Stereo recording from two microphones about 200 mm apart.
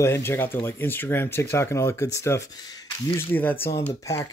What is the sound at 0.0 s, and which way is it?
Speech, 10° left (ahead or behind).